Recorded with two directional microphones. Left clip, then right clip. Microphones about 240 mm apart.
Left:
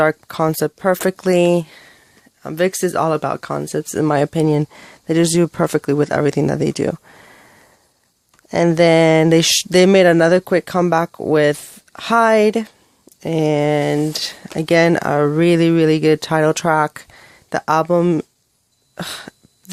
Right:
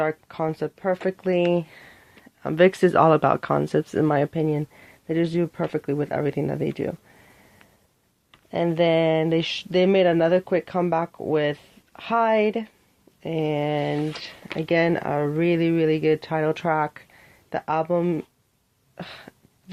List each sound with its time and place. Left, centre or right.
0.0 s speech: left
2.4 s speech: centre
4.0 s speech: left
8.4 s speech: left
18.9 s a sound: left